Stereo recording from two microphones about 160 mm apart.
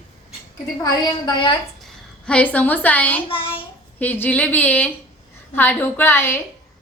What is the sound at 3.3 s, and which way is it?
Speech, 35° left (ahead or behind).